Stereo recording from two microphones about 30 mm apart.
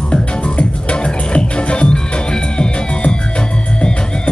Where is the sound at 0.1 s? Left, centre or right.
Left.